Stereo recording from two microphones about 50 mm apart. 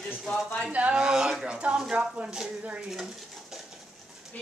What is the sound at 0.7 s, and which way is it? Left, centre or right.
Child singing, right.